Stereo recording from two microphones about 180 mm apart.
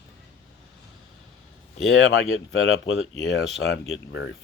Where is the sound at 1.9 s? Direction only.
90° left.